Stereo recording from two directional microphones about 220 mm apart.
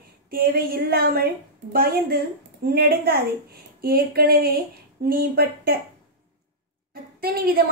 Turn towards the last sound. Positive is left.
turn(degrees=-45)  # may be behind; listen again after turning